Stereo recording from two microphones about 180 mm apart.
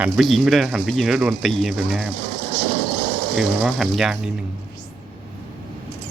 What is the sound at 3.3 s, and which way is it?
Speech, centre (ahead or behind).